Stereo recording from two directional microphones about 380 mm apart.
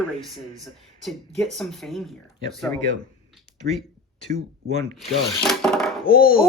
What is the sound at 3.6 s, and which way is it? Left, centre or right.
Speech, right.